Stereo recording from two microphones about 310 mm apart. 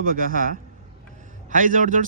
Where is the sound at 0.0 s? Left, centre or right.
Right.